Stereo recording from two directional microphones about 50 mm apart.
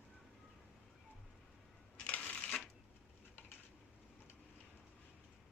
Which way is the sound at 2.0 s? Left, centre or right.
Left.